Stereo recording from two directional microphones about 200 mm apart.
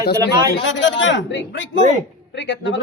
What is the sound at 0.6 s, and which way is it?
A man's voice, 65° left (ahead or behind).